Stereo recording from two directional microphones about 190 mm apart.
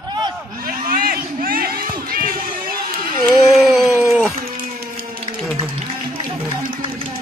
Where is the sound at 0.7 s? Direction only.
50° right (ahead or behind).